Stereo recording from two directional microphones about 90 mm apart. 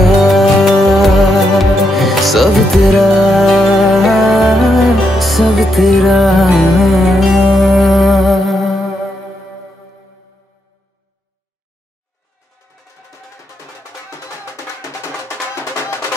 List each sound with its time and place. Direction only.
0.0 s music: centre (ahead or behind)
14.4 s music: 35° left (ahead or behind)